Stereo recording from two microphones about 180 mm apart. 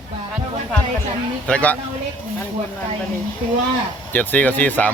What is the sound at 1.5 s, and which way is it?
Speech, 5° left (ahead or behind).